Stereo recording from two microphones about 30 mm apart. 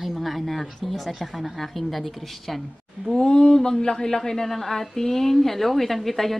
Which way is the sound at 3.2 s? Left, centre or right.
Left.